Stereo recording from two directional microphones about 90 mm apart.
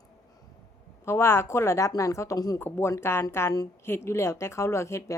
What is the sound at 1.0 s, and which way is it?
Speech, 30° left (ahead or behind).